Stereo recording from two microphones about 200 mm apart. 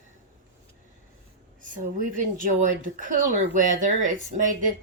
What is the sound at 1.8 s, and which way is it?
Speech, 40° right (ahead or behind).